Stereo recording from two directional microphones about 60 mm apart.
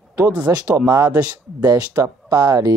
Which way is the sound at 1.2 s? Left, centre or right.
Right.